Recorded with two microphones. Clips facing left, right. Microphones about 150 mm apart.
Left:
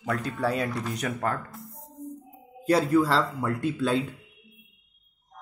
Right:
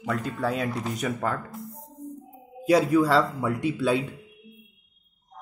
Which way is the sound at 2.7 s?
Centre (ahead or behind).